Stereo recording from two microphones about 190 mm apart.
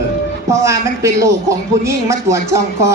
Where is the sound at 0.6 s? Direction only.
15° right (ahead or behind).